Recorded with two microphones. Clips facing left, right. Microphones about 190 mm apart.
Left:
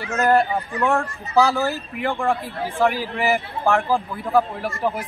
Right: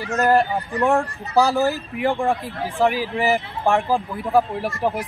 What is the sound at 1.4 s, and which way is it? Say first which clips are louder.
Speech: right 1 dB; 15° right (ahead or behind).